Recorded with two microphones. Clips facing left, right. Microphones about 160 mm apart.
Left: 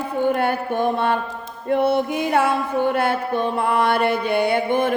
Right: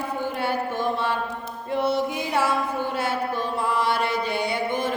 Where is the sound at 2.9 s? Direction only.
60° left (ahead or behind).